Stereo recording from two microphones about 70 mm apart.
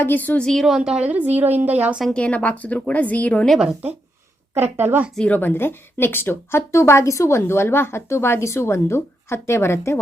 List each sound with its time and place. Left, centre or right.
0.0 s a woman's voice: left
0.4 s a woman's voice: centre
0.8 s a woman's voice: centre
1.0 s a woman's voice: right
2.1 s a woman's voice: centre
4.8 s speech: right
5.3 s a woman's voice: left